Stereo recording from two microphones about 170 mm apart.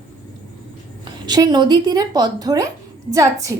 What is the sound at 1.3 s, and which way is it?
A woman's voice, 25° right (ahead or behind).